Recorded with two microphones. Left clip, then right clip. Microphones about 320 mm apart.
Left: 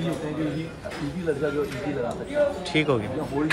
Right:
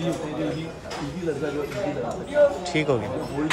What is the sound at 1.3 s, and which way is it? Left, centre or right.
Speech, centre.